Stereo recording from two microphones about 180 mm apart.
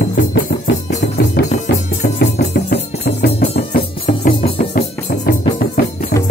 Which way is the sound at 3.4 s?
40° left (ahead or behind).